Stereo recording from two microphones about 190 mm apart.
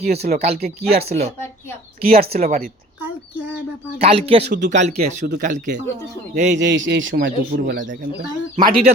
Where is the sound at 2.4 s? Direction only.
50° right (ahead or behind).